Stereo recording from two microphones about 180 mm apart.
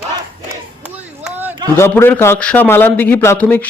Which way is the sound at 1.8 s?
15° left (ahead or behind).